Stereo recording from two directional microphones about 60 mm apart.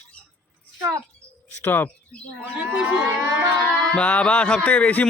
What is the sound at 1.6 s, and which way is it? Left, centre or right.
Speech, left.